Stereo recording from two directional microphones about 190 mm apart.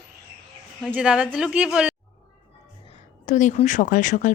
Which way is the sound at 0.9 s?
5° right (ahead or behind).